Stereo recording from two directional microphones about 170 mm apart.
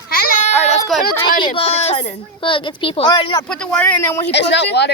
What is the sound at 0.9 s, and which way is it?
Speech, centre (ahead or behind).